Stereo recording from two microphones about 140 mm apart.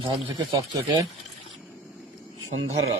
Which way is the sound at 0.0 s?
25° right (ahead or behind).